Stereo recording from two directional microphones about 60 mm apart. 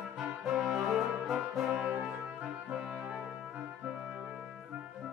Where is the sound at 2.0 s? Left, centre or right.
Right.